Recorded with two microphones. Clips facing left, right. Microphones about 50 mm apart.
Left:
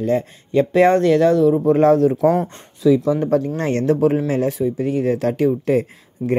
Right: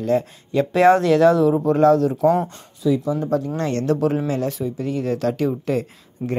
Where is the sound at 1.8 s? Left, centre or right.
Left.